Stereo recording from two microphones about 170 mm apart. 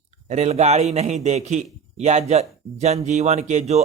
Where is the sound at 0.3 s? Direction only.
40° right (ahead or behind).